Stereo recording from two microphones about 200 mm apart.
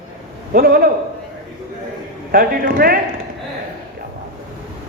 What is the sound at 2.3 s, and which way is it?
Speech, 45° right (ahead or behind).